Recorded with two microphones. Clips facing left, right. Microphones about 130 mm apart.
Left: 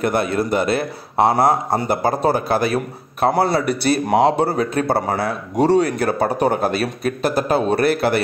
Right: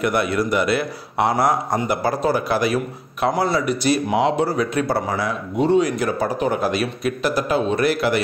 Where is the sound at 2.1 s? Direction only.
50° left (ahead or behind).